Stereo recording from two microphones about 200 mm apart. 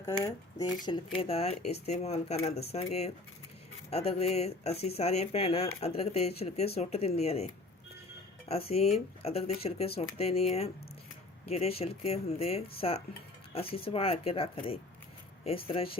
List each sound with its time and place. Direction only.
0.9 s speech: 25° left (ahead or behind)
8.4 s speech: 30° left (ahead or behind)
11.4 s speech: 30° left (ahead or behind)